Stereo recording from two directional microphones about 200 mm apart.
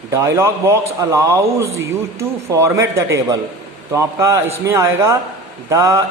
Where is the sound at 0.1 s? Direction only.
15° right (ahead or behind).